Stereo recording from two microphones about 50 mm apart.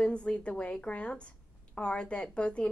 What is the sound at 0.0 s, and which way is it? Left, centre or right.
A woman's voice, left.